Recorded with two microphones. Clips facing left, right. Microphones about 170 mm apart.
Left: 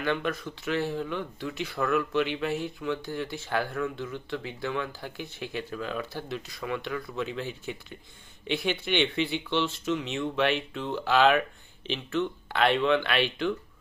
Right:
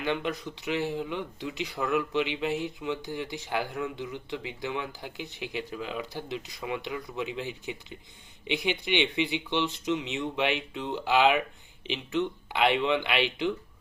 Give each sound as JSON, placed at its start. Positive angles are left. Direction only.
{"t": 0.0, "sound": "speech", "side_deg": -20}